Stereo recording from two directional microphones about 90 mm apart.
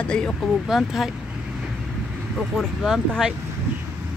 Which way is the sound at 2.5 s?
Centre (ahead or behind).